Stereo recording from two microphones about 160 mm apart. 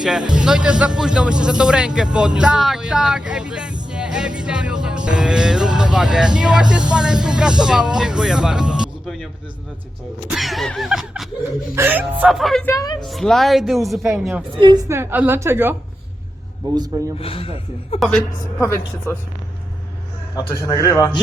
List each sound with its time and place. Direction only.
0.3 s music: 5° right (ahead or behind)
11.7 s speech: 15° right (ahead or behind)
12.6 s a man's voice: 25° left (ahead or behind)
13.1 s music: centre (ahead or behind)
14.5 s speech: 30° right (ahead or behind)
14.8 s speech: 15° right (ahead or behind)
17.2 s speech: 35° left (ahead or behind)
18.0 s music: 5° left (ahead or behind)
19.1 s speech: 15° left (ahead or behind)
20.5 s a man's voice: 20° left (ahead or behind)